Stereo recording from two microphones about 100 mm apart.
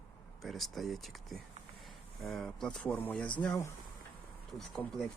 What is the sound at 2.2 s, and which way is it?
Speech, centre (ahead or behind).